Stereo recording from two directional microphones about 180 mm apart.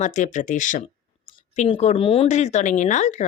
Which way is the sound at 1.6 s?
30° left (ahead or behind).